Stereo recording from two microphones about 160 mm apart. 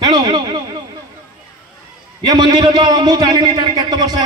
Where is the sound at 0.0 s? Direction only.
25° right (ahead or behind).